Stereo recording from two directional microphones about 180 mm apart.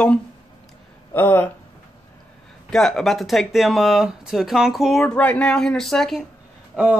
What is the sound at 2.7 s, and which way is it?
Speech, 5° left (ahead or behind).